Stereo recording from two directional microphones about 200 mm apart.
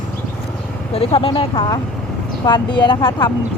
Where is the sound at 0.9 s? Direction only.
30° left (ahead or behind).